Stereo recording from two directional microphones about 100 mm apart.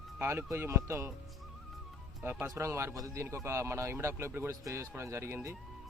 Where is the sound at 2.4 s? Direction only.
30° right (ahead or behind).